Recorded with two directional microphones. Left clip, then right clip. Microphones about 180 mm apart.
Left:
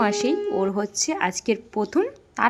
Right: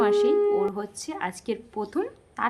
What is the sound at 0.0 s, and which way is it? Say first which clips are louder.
Speech: right 2 dB; 25° left (ahead or behind).